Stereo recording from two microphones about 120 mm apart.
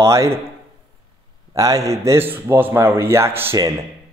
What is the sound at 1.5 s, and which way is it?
Speech, 30° right (ahead or behind).